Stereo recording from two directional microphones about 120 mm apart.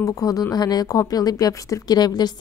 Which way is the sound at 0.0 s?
30° left (ahead or behind).